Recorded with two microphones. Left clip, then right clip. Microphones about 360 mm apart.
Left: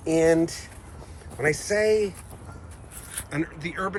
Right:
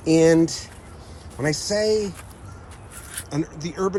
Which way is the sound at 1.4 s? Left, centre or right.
Centre.